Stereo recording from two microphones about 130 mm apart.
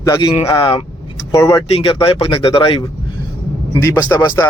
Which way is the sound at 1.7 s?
45° left (ahead or behind).